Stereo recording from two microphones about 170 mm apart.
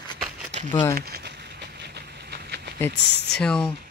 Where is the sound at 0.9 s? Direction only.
65° right (ahead or behind).